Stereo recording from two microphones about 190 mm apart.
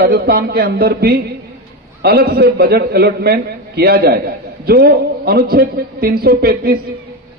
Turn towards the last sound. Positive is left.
turn(degrees=-55)  # may be behind; listen again after turning